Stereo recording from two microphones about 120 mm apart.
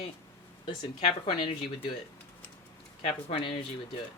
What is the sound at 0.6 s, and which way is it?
Speech, 50° left (ahead or behind).